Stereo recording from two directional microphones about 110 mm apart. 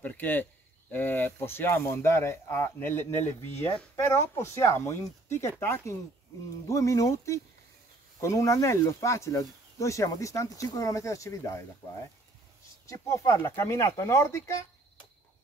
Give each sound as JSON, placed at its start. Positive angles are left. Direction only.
{"t": 0.0, "sound": "speech", "side_deg": 15}
{"t": 12.8, "sound": "speech", "side_deg": 30}